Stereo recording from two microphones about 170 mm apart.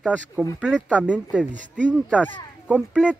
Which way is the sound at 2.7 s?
5° right (ahead or behind).